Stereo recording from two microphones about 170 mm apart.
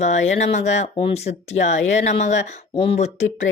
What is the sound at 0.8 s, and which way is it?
Speech, 30° left (ahead or behind).